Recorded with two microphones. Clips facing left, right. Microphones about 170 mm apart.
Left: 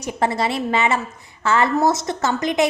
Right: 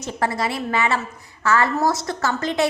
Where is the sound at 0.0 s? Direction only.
20° left (ahead or behind).